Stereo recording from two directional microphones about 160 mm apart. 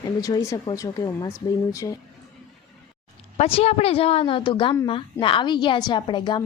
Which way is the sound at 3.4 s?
40° left (ahead or behind).